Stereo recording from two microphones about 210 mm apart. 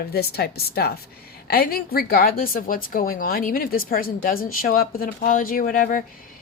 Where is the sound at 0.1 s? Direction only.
50° left (ahead or behind).